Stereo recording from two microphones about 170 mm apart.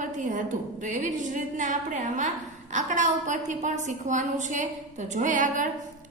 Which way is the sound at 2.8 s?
45° right (ahead or behind).